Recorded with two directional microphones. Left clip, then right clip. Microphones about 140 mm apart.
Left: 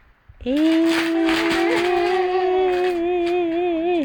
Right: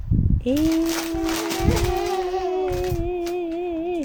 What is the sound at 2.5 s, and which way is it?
Music, 15° left (ahead or behind).